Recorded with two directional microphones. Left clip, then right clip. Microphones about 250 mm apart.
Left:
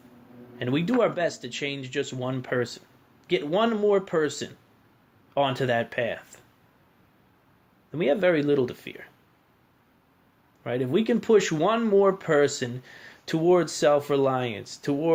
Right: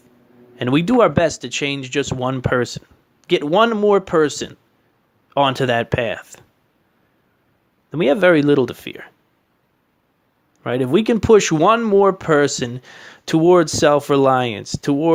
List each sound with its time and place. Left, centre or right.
0.6 s speech: right
7.9 s speech: right
10.6 s speech: right